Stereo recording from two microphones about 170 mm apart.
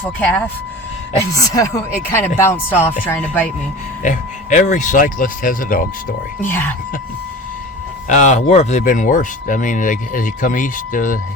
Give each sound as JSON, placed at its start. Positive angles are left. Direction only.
{"t": 0.0, "sound": "speech", "side_deg": 10}
{"t": 4.0, "sound": "speech", "side_deg": 45}
{"t": 6.4, "sound": "speech", "side_deg": 10}
{"t": 8.0, "sound": "speech", "side_deg": 50}
{"t": 8.8, "sound": "speech", "side_deg": 50}